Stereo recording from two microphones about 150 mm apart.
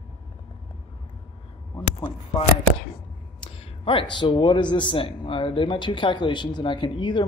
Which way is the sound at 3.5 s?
35° left (ahead or behind).